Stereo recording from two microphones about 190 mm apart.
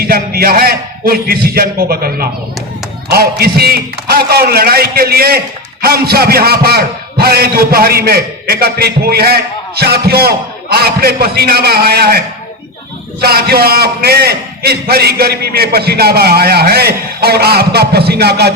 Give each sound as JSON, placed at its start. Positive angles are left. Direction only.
{"t": 0.0, "sound": "a man's voice", "side_deg": -55}
{"t": 13.2, "sound": "a man's voice", "side_deg": -55}